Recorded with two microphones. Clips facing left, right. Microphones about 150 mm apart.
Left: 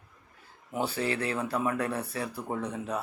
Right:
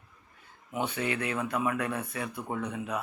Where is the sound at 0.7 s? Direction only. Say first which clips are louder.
Left 1 dB; 35° left (ahead or behind).